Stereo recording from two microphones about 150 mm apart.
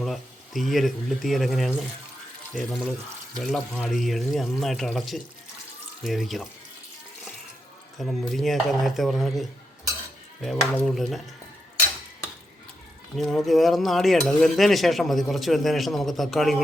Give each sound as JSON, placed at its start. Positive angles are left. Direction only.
{"t": 0.0, "sound": "speech", "side_deg": 0}
{"t": 7.9, "sound": "speech", "side_deg": 0}
{"t": 13.1, "sound": "speech", "side_deg": 0}